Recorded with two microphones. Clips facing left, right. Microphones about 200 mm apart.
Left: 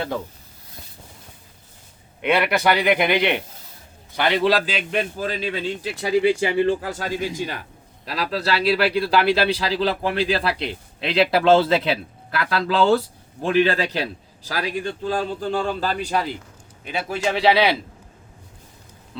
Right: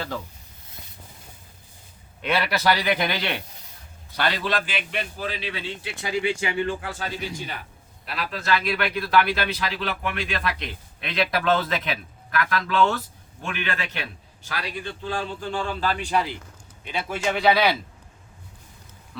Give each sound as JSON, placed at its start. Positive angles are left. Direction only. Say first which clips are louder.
{"t": 2.2, "sound": "a man's voice", "louder": "left 4 dB", "side_deg": 20}
{"t": 17.4, "sound": "a man's voice", "louder": "left 2 dB", "side_deg": 25}